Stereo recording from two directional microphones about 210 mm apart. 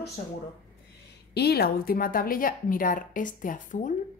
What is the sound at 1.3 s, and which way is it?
A woman's voice, 50° left (ahead or behind).